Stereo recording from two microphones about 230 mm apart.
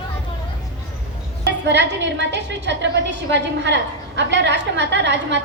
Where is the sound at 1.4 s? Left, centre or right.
Right.